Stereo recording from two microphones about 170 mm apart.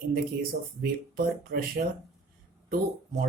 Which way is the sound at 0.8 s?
65° right (ahead or behind).